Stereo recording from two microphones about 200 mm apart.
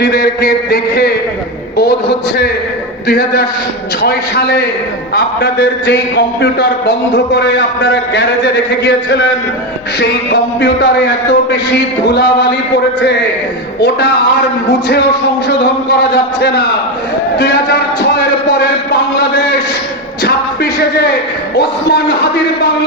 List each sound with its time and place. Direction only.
0.0 s a sound: 50° left (ahead or behind)
1.7 s a man's voice: 55° left (ahead or behind)
4.0 s a sound: 55° left (ahead or behind)
5.1 s a man's voice: 55° left (ahead or behind)
14.7 s a man's voice: 55° left (ahead or behind)
16.4 s a man's voice: 55° left (ahead or behind)
20.2 s music: 55° left (ahead or behind)
21.5 s a man's voice: 55° left (ahead or behind)